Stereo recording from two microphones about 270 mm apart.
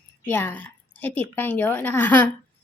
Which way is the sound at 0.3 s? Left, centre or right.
Centre.